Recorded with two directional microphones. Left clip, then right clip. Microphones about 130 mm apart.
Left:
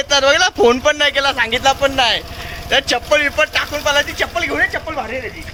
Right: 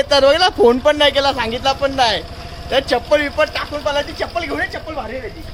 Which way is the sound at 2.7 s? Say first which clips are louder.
Left 1 dB; 35° right (ahead or behind).